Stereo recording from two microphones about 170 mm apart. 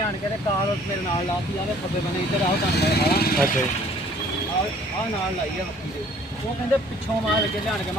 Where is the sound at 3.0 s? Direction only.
60° left (ahead or behind).